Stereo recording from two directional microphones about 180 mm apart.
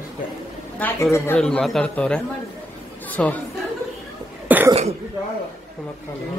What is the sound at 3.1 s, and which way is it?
Chatter, 10° left (ahead or behind).